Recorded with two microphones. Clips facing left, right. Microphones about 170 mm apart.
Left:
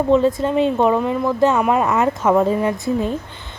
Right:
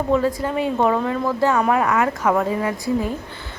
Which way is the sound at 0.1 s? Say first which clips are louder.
Left 4 dB; 25° left (ahead or behind).